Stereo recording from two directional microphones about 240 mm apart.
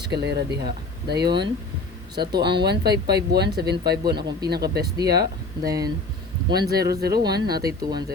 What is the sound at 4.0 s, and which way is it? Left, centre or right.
Speech, centre.